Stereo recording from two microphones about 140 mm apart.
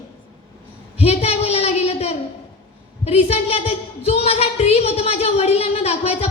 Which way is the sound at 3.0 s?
45° left (ahead or behind).